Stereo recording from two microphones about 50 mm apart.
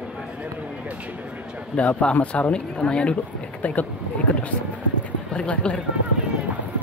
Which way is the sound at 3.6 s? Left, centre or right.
Left.